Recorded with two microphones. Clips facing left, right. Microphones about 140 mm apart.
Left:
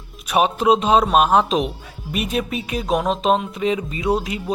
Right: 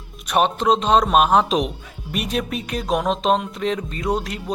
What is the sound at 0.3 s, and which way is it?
Speech, 5° left (ahead or behind).